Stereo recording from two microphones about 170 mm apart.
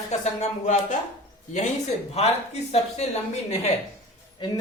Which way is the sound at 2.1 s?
40° left (ahead or behind).